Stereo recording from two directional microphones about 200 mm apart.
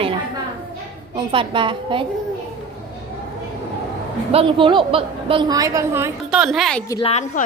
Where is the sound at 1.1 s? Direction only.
25° right (ahead or behind).